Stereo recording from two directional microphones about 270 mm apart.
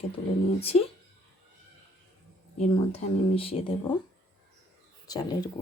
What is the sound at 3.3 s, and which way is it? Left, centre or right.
Speech, left.